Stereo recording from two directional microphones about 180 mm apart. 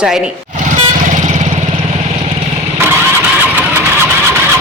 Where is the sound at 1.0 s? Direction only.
40° right (ahead or behind).